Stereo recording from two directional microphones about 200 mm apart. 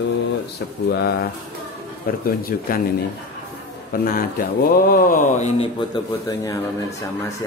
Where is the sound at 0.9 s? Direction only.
55° left (ahead or behind); by 6.6 s 20° left (ahead or behind).